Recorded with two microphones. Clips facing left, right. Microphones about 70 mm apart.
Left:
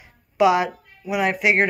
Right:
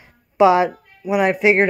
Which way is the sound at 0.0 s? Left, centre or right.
Right.